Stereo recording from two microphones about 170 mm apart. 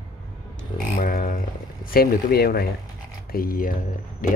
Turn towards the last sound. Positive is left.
turn(degrees=50)  # may be behind; listen again after turning